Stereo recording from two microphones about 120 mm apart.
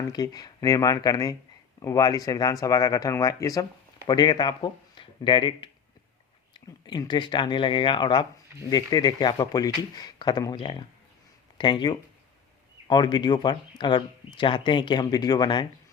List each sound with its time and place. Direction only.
0.1 s speech: 30° left (ahead or behind)